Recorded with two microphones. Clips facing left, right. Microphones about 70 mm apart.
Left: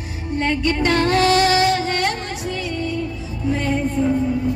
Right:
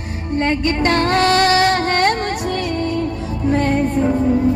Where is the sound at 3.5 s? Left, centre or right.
Right.